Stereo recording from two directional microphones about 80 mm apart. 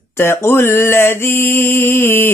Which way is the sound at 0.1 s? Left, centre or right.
Left.